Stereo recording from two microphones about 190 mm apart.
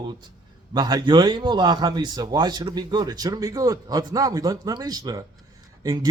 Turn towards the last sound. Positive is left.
turn(degrees=-20)  # may be behind; listen again after turning